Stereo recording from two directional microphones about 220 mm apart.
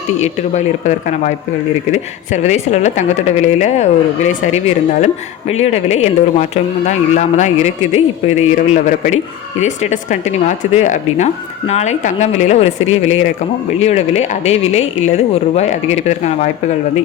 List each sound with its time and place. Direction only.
0.2 s a man's voice: 30° left (ahead or behind)